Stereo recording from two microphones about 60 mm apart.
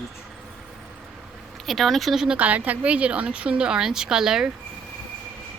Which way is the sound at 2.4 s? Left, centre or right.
Right.